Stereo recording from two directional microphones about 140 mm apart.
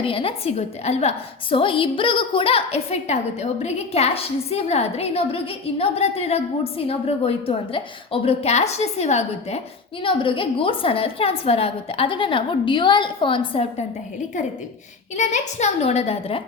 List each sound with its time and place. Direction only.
0.0 s a woman's voice: 40° left (ahead or behind)
10.0 s a woman's voice: 40° left (ahead or behind)
15.1 s a woman's voice: 60° left (ahead or behind)